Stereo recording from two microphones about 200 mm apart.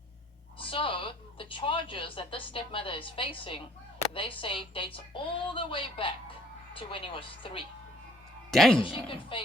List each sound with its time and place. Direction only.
0.6 s a woman's voice: 25° left (ahead or behind)
8.4 s a man's voice: centre (ahead or behind)
8.8 s a woman's voice: 25° left (ahead or behind)